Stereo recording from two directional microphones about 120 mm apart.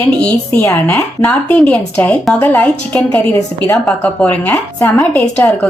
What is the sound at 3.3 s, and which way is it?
A woman's voice, 25° left (ahead or behind).